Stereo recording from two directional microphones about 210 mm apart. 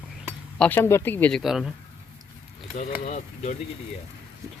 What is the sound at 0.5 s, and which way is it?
Speech, 5° left (ahead or behind).